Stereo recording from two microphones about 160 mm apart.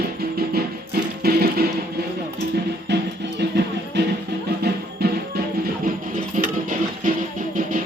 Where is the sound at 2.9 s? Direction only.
90° right.